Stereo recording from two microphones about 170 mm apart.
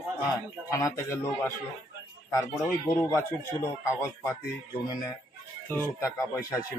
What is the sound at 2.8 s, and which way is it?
A man's voice, 15° left (ahead or behind).